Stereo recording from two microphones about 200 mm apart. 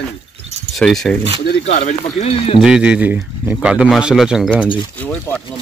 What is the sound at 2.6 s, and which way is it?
Speech, 5° right (ahead or behind).